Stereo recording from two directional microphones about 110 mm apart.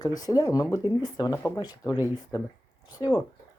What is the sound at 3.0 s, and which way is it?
Speech, 35° left (ahead or behind).